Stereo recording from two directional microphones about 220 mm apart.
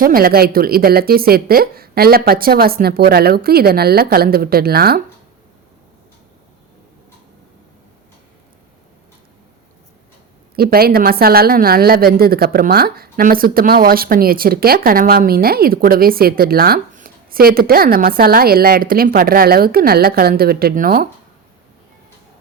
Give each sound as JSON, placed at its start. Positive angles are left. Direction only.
{"t": 0.0, "sound": "speech", "side_deg": -40}
{"t": 10.5, "sound": "speech", "side_deg": -45}